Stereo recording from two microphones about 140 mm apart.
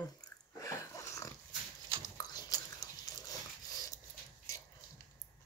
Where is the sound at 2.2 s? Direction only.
25° left (ahead or behind).